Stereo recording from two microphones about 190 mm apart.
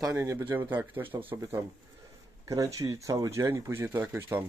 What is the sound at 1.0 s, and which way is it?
Speech, 30° right (ahead or behind).